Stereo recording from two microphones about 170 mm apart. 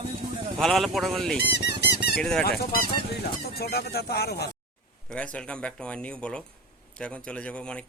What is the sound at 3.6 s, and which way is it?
Speech, 65° left (ahead or behind).